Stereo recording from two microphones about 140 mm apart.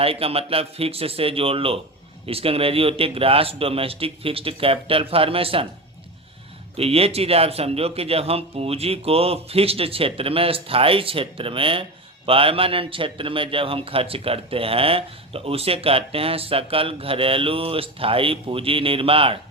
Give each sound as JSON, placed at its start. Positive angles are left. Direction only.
{"t": 0.0, "sound": "speech", "side_deg": -45}
{"t": 6.7, "sound": "speech", "side_deg": -45}